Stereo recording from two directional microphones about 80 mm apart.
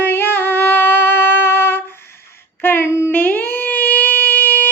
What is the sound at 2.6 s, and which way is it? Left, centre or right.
Singing, left.